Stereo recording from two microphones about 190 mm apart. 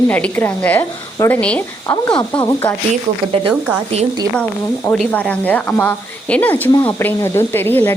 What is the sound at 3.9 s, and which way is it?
Speech, 30° right (ahead or behind).